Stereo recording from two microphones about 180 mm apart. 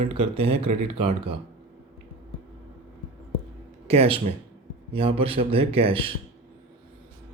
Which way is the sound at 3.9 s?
35° right (ahead or behind).